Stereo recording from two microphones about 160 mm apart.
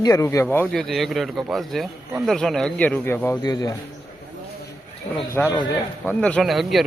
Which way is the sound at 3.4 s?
25° left (ahead or behind).